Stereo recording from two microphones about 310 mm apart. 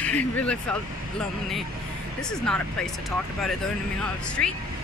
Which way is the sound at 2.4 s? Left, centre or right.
Centre.